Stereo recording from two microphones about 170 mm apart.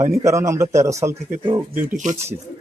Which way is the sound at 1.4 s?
30° right (ahead or behind).